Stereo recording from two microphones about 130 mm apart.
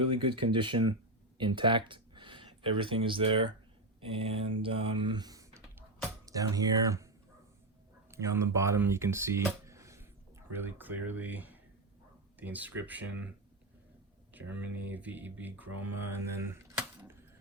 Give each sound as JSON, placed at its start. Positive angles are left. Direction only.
{"t": 0.0, "sound": "speech", "side_deg": -40}
{"t": 8.1, "sound": "speech", "side_deg": -20}
{"t": 14.3, "sound": "speech", "side_deg": -15}
{"t": 16.4, "sound": "typewriter", "side_deg": -15}